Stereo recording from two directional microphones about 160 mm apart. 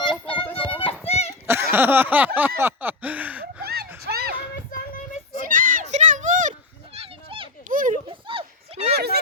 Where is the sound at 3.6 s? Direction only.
80° right.